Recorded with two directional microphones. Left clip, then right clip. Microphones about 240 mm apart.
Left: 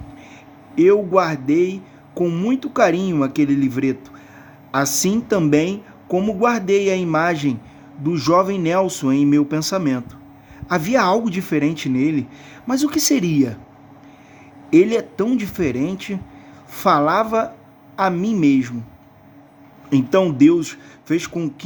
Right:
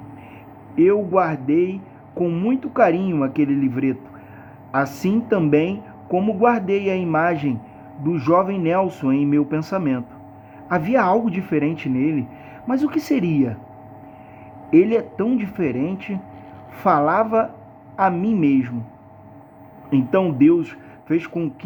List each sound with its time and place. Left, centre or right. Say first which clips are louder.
0.8 s speech: left 2 dB; left
14.7 s speech: left 1 dB; left
19.9 s speech: left 2 dB; left